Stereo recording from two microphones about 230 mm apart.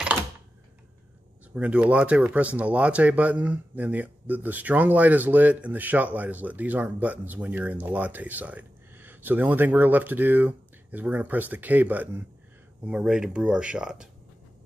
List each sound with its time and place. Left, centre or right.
1.5 s speech: centre